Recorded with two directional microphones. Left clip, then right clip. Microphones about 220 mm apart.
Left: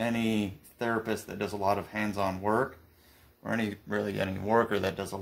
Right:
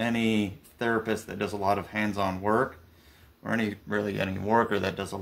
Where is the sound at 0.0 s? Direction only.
5° left (ahead or behind).